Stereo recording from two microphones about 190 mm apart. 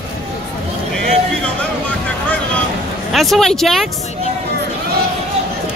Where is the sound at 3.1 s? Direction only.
Centre (ahead or behind).